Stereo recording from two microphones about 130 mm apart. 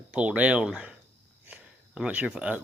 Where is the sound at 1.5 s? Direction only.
10° right (ahead or behind).